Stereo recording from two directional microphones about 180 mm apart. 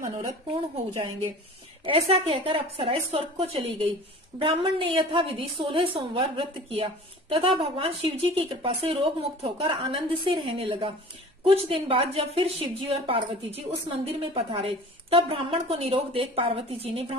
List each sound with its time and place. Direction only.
0.0 s a woman's voice: 25° right (ahead or behind)
1.9 s a woman's voice: 30° right (ahead or behind)